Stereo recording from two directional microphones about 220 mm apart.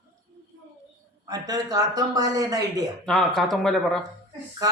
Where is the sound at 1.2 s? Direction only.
15° right (ahead or behind).